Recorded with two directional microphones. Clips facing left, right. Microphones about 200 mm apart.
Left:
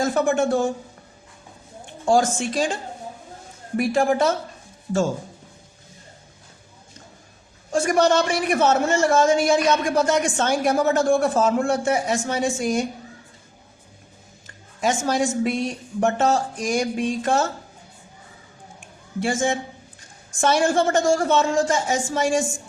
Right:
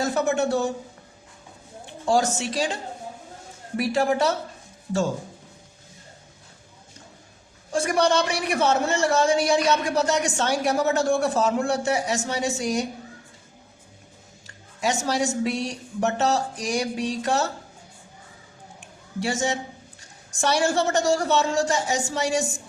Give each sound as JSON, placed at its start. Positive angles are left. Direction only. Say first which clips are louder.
{"t": 0.0, "sound": "a man's voice", "louder": "left 3 dB", "side_deg": 50}
{"t": 2.0, "sound": "a man's voice", "louder": "left 3 dB", "side_deg": 50}
{"t": 3.8, "sound": "a man's voice", "louder": "left 3 dB", "side_deg": 50}
{"t": 7.7, "sound": "a man's voice", "louder": "left 3 dB", "side_deg": 50}
{"t": 14.8, "sound": "a man's voice", "louder": "left 3 dB", "side_deg": 50}
{"t": 19.2, "sound": "a man's voice", "louder": "left 3 dB", "side_deg": 50}